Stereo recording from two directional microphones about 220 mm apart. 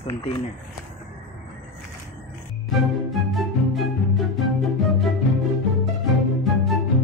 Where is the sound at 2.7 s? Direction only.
Centre (ahead or behind).